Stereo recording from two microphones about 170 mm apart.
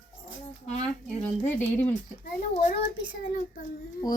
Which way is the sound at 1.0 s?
10° left (ahead or behind).